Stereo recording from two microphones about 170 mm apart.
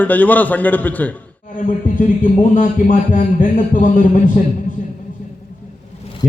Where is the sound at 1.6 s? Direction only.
50° left (ahead or behind).